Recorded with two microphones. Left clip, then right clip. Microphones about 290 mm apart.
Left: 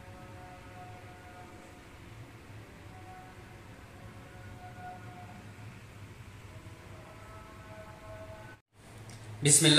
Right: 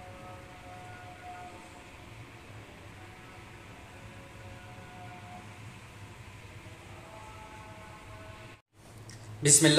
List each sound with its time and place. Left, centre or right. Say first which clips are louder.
9.4 s speech: right 3 dB; right